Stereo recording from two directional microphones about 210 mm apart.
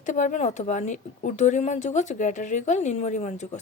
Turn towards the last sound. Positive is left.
turn(degrees=35)  # may be behind; listen again after turning